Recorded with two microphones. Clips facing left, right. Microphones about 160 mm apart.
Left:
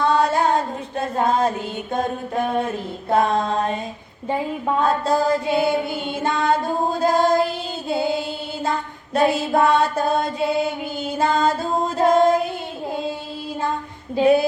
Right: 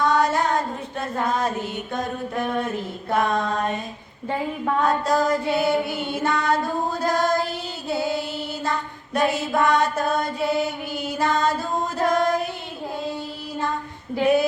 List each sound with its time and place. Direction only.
0.0 s female singing: 30° left (ahead or behind)
3.1 s a sound: 30° left (ahead or behind)
4.8 s mantra: 30° left (ahead or behind)
7.0 s music: 25° left (ahead or behind)
9.1 s mantra: 30° left (ahead or behind)
11.2 s music: 25° left (ahead or behind)